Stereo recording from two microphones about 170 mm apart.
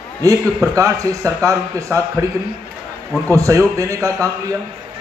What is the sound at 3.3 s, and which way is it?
Speech, 20° right (ahead or behind).